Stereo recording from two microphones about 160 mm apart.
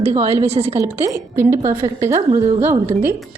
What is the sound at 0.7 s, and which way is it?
A woman's voice, 15° right (ahead or behind).